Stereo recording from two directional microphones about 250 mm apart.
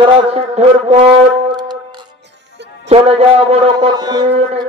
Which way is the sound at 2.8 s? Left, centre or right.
Right.